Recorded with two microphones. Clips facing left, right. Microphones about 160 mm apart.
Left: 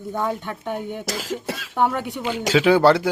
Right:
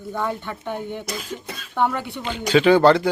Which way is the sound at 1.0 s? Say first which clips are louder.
Left 4 dB; 90° left.